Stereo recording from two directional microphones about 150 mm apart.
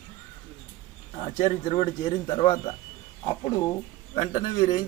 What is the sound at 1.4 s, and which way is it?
Speech, 40° left (ahead or behind).